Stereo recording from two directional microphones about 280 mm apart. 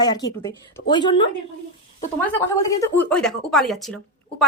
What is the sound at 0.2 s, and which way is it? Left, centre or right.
Speech, centre.